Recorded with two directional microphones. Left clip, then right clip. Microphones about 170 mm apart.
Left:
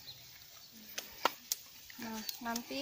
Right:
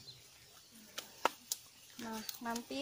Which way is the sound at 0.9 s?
10° left (ahead or behind).